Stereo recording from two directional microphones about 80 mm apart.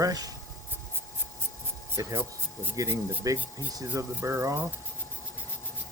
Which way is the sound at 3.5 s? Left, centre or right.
Right.